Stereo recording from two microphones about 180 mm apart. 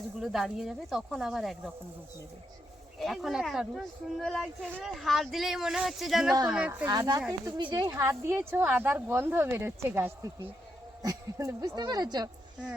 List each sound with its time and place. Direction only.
0.2 s speech: centre (ahead or behind)
3.0 s speech: centre (ahead or behind)
6.8 s a woman's voice: 20° right (ahead or behind)